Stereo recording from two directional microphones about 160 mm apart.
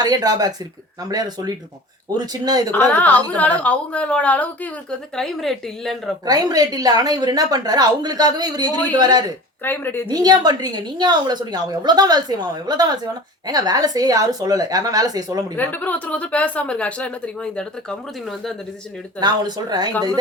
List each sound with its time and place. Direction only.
0.0 s a woman's voice: 25° right (ahead or behind)
2.7 s speech: 10° left (ahead or behind)
6.2 s a woman's voice: 25° right (ahead or behind)
9.6 s speech: 15° left (ahead or behind)
10.1 s a woman's voice: 25° right (ahead or behind)
15.5 s speech: 10° left (ahead or behind)
19.2 s a woman's voice: 25° right (ahead or behind)